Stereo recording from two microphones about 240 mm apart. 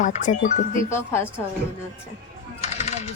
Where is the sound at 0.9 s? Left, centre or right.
Centre.